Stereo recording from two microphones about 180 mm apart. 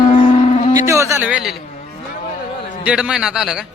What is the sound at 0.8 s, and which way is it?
Speech, 15° right (ahead or behind).